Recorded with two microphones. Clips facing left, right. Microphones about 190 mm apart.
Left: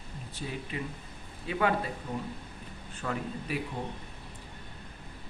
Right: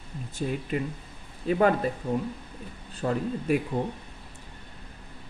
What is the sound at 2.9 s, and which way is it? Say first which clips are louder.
Speech: right 7 dB; 35° right (ahead or behind).